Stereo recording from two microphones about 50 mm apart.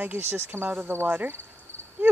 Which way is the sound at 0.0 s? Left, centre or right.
Right.